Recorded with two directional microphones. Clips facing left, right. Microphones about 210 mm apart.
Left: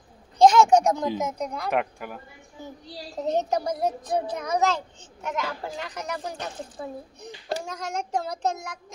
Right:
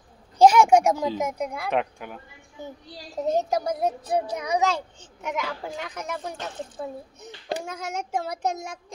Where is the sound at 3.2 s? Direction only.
Centre (ahead or behind).